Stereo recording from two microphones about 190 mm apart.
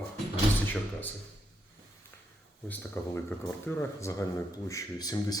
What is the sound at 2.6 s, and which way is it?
Speech, 10° left (ahead or behind).